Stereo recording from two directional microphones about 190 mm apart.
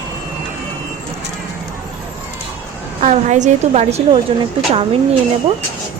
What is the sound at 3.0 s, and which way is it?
A woman's voice, 40° right (ahead or behind).